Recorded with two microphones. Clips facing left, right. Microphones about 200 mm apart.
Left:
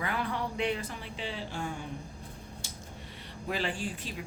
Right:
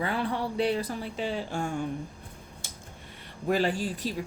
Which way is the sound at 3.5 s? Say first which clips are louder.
Right 7 dB; 40° right (ahead or behind).